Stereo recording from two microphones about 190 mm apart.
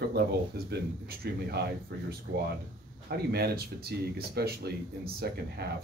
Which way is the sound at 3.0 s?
55° right (ahead or behind).